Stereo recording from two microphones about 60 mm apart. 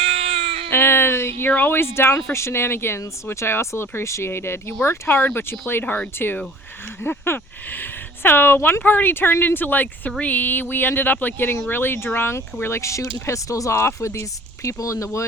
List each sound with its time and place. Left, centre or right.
0.7 s speech: left
13.7 s speech: left